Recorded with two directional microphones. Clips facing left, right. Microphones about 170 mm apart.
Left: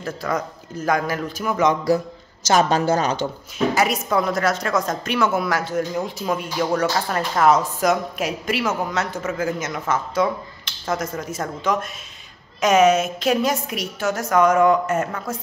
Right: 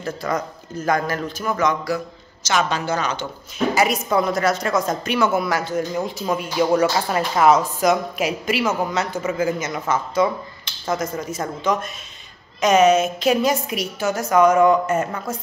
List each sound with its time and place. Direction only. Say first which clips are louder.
0.0 s a woman's voice: right 1 dB; 5° left (ahead or behind)
2.4 s speech: left 4 dB; 40° left (ahead or behind)
3.5 s a woman's voice: right 1 dB; centre (ahead or behind)